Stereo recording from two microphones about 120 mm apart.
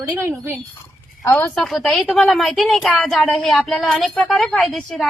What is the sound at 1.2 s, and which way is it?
Speech, 25° left (ahead or behind).